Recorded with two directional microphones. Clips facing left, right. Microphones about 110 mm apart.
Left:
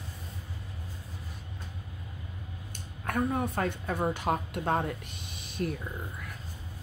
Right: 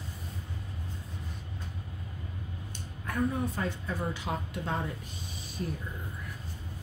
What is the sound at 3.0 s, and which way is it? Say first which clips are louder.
Speech: left 1 dB; 60° left (ahead or behind).